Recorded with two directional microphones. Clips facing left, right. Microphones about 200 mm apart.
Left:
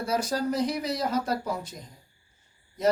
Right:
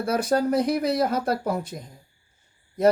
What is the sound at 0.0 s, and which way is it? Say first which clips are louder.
Speech: right 5 dB; 55° right (ahead or behind).